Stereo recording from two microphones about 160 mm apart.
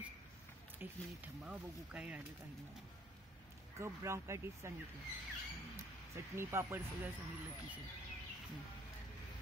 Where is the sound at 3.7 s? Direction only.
15° right (ahead or behind).